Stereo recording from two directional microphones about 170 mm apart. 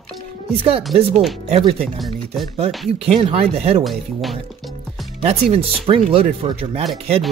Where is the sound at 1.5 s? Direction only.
40° right (ahead or behind).